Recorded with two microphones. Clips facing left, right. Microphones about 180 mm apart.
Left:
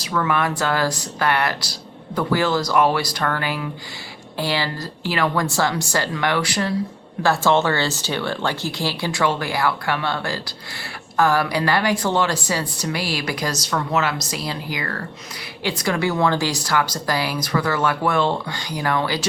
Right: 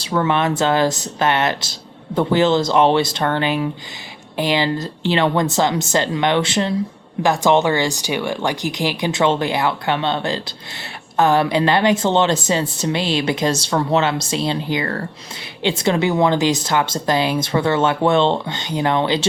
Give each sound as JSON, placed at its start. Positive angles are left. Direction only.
{"t": 0.0, "sound": "speech", "side_deg": -30}